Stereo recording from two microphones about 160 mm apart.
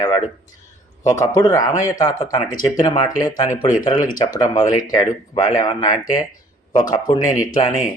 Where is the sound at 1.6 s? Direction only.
50° left (ahead or behind).